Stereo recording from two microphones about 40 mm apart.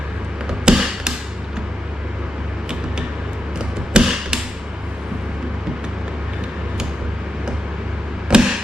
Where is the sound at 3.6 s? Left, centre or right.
Right.